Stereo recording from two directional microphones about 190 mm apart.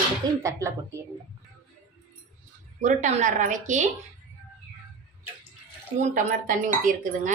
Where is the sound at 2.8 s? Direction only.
40° right (ahead or behind).